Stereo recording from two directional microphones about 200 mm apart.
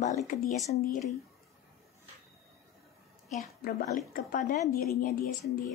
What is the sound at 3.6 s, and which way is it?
A woman's voice, 45° left (ahead or behind).